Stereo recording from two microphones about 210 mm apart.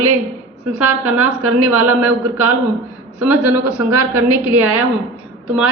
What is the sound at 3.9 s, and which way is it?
Speech, 90° right.